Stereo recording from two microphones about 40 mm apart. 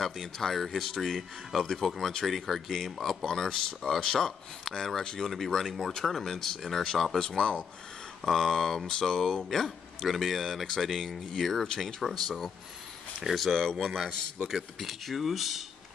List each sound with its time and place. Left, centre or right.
0.0 s speech: centre
3.3 s speech: centre
8.2 s speech: centre
10.0 s speech: centre
13.6 s speech: centre
13.8 s speech: centre